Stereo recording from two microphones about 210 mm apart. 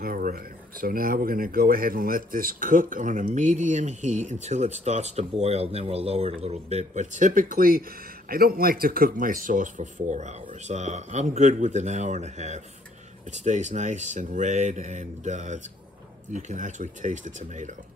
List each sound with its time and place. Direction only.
0.0 s speech: 45° right (ahead or behind)